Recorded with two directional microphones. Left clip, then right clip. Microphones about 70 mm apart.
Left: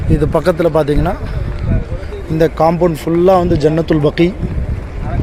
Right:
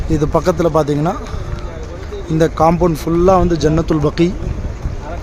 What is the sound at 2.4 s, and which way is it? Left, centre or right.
Speech, right.